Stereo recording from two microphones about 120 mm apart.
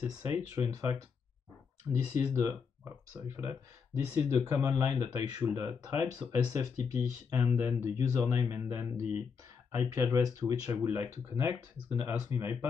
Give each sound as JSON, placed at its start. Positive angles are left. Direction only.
{"t": 0.6, "sound": "speech", "side_deg": -30}